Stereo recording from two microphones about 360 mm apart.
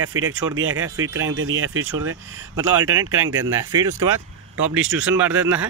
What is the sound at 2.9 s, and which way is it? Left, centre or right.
Speech, right.